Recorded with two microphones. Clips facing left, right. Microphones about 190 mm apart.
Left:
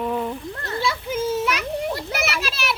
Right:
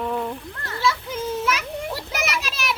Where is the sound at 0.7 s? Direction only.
20° left (ahead or behind).